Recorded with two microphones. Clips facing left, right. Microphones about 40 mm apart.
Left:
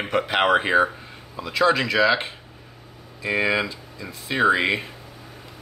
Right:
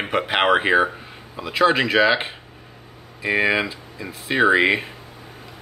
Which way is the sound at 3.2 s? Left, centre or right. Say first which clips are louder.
Right 2 dB; right.